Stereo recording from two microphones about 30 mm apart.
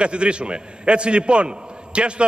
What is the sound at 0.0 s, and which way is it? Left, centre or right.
A man's voice, right.